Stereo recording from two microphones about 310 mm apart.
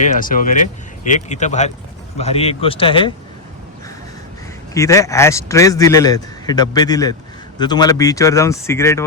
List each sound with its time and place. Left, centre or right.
0.0 s a man's voice: left
4.7 s a man's voice: centre